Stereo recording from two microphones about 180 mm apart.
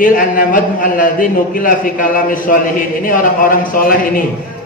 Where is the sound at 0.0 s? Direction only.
50° left (ahead or behind).